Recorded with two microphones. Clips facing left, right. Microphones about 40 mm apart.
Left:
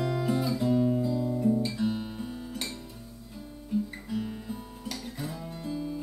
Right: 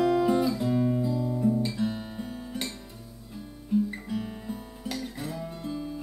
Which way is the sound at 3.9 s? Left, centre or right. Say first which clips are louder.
Right 1 dB; centre.